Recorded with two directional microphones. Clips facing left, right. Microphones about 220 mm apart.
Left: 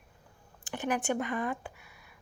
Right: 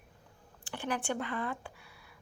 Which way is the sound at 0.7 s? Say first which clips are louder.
Left 4 dB; 15° left (ahead or behind).